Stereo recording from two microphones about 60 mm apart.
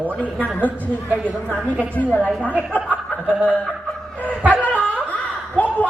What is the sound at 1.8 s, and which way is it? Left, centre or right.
Speech, left.